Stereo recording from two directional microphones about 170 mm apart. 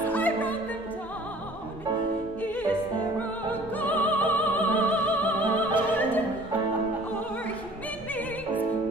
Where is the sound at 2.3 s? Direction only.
10° left (ahead or behind).